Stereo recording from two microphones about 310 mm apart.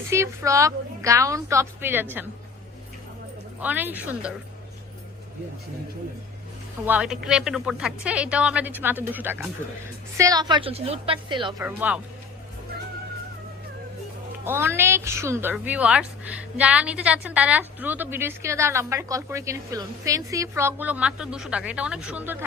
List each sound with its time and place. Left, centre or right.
0.1 s a woman's voice: centre
3.6 s speech: centre
6.8 s a woman's voice: centre
11.6 s speech: centre
14.4 s a woman's voice: centre